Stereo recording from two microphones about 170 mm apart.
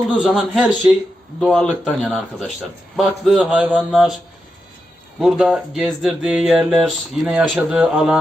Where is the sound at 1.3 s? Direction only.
Centre (ahead or behind).